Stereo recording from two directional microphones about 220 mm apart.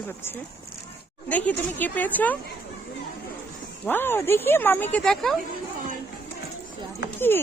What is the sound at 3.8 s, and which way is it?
Speech, 10° left (ahead or behind).